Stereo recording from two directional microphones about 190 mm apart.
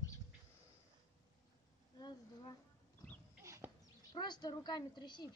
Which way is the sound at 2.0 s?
20° left (ahead or behind).